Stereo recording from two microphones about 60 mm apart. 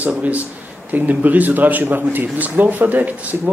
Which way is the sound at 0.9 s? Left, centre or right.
Right.